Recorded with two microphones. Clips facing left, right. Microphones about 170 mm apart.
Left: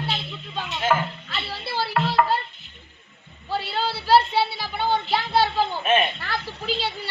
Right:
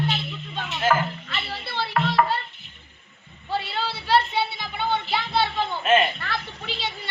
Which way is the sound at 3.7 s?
35° left (ahead or behind).